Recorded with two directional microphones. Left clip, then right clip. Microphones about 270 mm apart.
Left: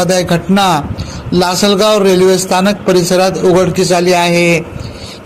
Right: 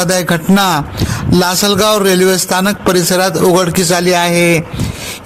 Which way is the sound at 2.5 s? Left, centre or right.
Right.